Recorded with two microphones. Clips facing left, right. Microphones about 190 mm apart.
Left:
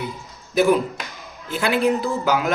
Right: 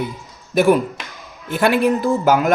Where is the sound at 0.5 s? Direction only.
55° right (ahead or behind).